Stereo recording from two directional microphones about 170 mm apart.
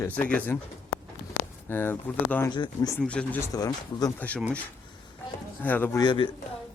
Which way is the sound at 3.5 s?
20° left (ahead or behind).